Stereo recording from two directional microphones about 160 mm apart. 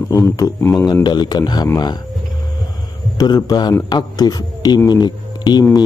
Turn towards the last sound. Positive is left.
turn(degrees=25)  # may be behind; listen again after turning